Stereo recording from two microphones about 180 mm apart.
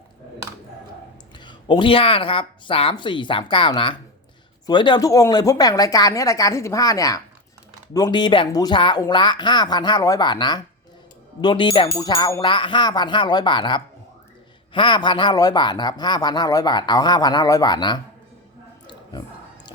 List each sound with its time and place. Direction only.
1.5 s speech: 25° left (ahead or behind)